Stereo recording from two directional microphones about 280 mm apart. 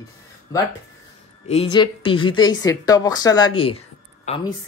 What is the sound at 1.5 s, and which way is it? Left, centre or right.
Speech, centre.